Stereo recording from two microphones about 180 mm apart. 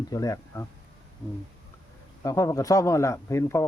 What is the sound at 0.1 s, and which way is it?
Speech, 20° left (ahead or behind).